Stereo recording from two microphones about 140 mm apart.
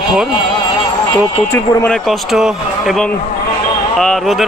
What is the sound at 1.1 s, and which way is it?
Speech, 20° left (ahead or behind).